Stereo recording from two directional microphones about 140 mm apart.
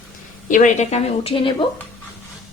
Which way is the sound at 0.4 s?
65° left (ahead or behind).